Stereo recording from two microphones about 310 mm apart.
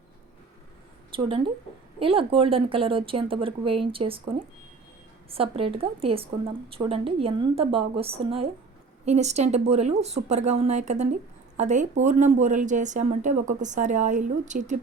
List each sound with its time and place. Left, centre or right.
1.1 s a woman's voice: centre